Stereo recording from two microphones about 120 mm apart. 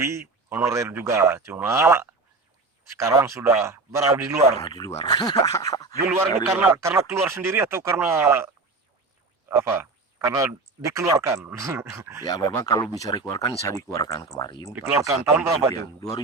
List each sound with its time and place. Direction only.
0.0 s speech: 25° right (ahead or behind)
4.6 s speech: 35° left (ahead or behind)
5.0 s a sound: 35° left (ahead or behind)
6.1 s speech: 20° right (ahead or behind)
9.5 s speech: 20° right (ahead or behind)
12.2 s speech: 35° left (ahead or behind)
13.0 s a sound: 30° left (ahead or behind)
14.3 s speech: 35° left (ahead or behind)
14.7 s speech: 20° right (ahead or behind)
15.7 s a sound: 30° left (ahead or behind)